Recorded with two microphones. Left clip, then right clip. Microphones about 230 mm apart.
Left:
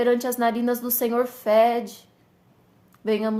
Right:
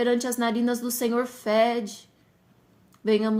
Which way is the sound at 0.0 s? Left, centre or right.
Right.